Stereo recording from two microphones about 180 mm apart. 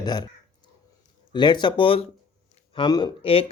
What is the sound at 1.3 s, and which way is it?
Speech, 25° left (ahead or behind).